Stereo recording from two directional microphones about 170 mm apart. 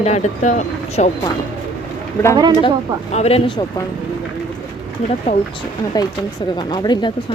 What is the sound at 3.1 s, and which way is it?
Speech, 40° left (ahead or behind).